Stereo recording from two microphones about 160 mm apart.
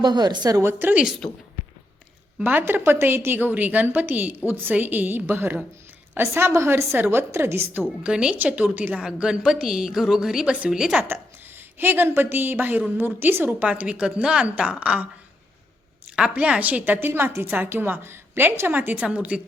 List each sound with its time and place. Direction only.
0.0 s a woman's voice: 25° right (ahead or behind); by 1.1 s 10° right (ahead or behind)
2.4 s a woman's voice: 15° right (ahead or behind)
11.1 s a woman's voice: 15° right (ahead or behind)
16.1 s a woman's voice: 5° right (ahead or behind)